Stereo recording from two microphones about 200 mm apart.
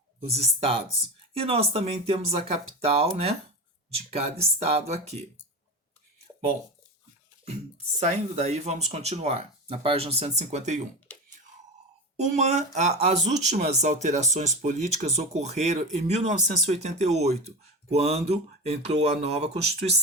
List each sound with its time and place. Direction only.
0.3 s speech: 30° right (ahead or behind)
4.6 s speech: 30° right (ahead or behind)
7.9 s speech: 35° right (ahead or behind)
12.1 s speech: 35° right (ahead or behind)